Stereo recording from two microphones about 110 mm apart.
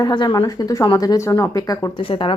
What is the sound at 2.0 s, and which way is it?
Speech, 50° left (ahead or behind).